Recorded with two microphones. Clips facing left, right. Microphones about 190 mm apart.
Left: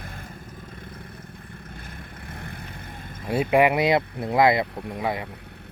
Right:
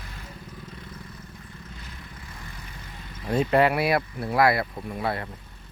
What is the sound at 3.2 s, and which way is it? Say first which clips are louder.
Speech: left 1 dB; 10° left (ahead or behind).